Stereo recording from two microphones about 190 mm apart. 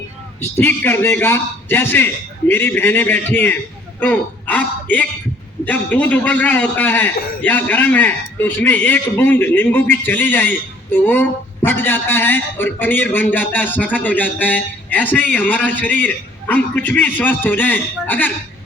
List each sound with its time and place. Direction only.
0.5 s a man's voice: 10° left (ahead or behind)